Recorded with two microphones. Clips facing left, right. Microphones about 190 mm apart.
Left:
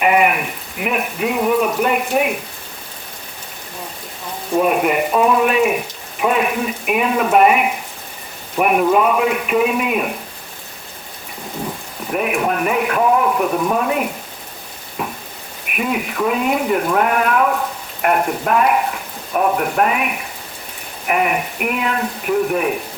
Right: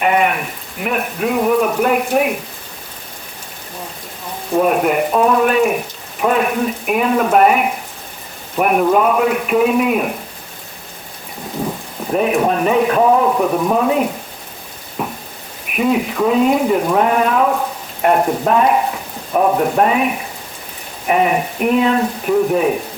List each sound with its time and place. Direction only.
0.0 s speech: 10° left (ahead or behind)
4.5 s a man's voice: 5° left (ahead or behind)
12.1 s speech: 30° right (ahead or behind)
13.5 s speech: 15° right (ahead or behind)
15.9 s speech: 25° right (ahead or behind)